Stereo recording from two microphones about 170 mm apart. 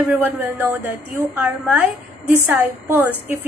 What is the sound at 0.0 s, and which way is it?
A woman's voice, 10° right (ahead or behind).